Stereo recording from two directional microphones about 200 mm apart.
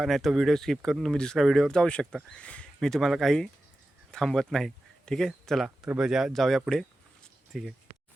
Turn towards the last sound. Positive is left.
turn(degrees=0)  # may be behind; listen again after turning